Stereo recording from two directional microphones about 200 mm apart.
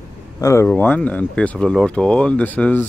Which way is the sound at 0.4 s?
15° left (ahead or behind).